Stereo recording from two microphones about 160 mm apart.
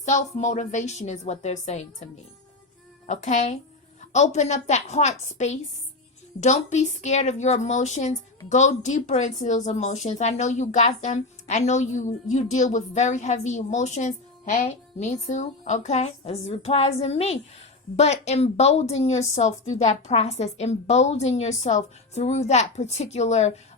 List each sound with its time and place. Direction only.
0.0 s speech: 50° left (ahead or behind)
3.1 s speech: 50° left (ahead or behind)